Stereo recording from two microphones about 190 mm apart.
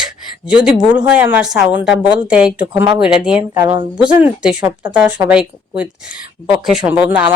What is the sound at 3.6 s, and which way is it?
Speech, 20° right (ahead or behind).